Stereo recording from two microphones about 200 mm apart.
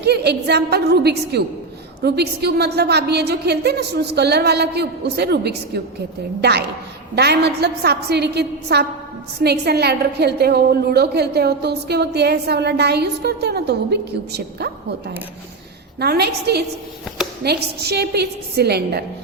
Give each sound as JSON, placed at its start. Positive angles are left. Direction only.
{"t": 0.0, "sound": "a woman's voice", "side_deg": -55}